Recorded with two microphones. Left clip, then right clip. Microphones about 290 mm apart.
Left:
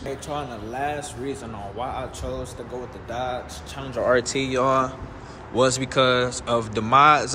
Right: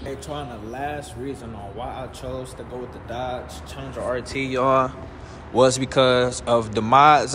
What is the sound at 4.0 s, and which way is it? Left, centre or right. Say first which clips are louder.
Speech: left 6 dB; left.